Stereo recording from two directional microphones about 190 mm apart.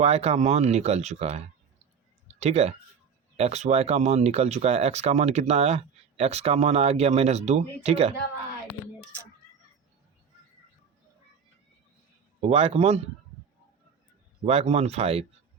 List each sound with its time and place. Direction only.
0.0 s speech: 35° right (ahead or behind)
2.2 s a sound: 35° right (ahead or behind)
3.3 s speech: 35° right (ahead or behind)
12.4 s speech: 30° right (ahead or behind)
14.4 s speech: 35° right (ahead or behind)